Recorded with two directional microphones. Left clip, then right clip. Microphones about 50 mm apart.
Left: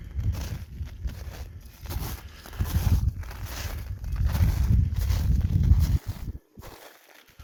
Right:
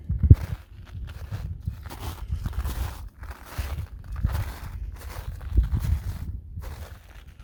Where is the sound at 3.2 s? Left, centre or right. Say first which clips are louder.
Left 1 dB; right.